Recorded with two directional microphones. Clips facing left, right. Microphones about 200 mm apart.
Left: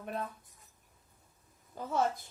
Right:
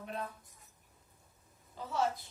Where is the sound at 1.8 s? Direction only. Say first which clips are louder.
Left 3 dB; 50° left (ahead or behind).